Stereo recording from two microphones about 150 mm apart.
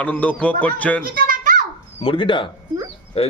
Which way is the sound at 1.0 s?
75° right (ahead or behind).